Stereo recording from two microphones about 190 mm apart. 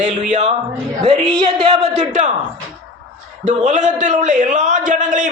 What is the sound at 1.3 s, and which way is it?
Speech, 25° right (ahead or behind).